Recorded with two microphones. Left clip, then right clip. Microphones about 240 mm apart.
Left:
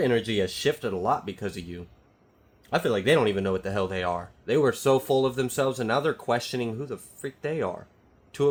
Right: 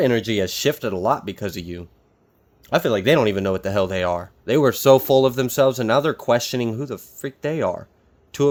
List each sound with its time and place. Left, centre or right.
0.0 s speech: right